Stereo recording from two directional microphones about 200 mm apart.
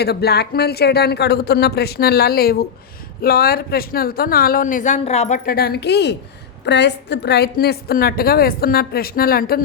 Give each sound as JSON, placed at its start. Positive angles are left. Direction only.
{"t": 0.0, "sound": "a woman's voice", "side_deg": 55}
{"t": 5.5, "sound": "a woman's voice", "side_deg": 50}